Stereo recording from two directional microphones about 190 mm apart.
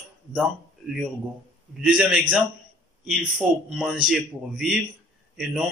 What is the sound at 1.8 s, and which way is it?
Speech, 5° right (ahead or behind).